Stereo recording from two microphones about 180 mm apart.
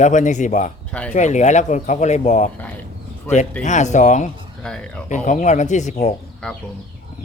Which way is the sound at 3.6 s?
40° left (ahead or behind).